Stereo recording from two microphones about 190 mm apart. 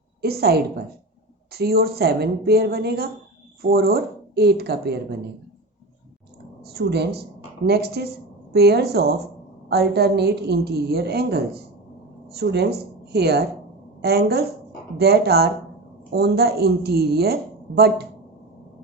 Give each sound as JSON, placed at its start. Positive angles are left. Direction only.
{"t": 0.2, "sound": "a woman's voice", "side_deg": -55}
{"t": 6.7, "sound": "a woman's voice", "side_deg": -60}